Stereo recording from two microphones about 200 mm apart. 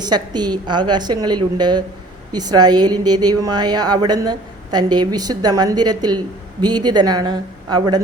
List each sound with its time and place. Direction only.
0.0 s a woman's voice: 20° right (ahead or behind)